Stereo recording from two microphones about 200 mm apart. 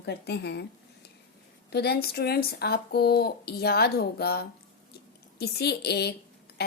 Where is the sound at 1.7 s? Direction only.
55° left (ahead or behind).